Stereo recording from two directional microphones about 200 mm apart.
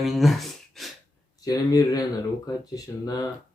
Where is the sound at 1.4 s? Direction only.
20° left (ahead or behind).